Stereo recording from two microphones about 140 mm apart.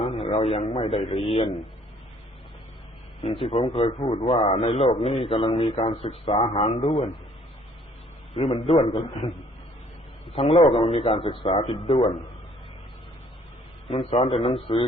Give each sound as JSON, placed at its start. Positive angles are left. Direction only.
{"t": 0.0, "sound": "a sound", "side_deg": 45}
{"t": 0.6, "sound": "a man's voice", "side_deg": 50}
{"t": 3.2, "sound": "a man's voice", "side_deg": 45}
{"t": 8.3, "sound": "a man's voice", "side_deg": 50}
{"t": 10.6, "sound": "a man's voice", "side_deg": 45}
{"t": 13.8, "sound": "a man's voice", "side_deg": 45}